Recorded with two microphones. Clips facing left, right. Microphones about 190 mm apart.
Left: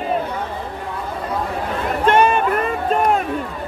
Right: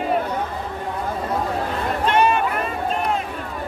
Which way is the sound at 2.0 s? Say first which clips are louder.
Left 4 dB; 50° left (ahead or behind).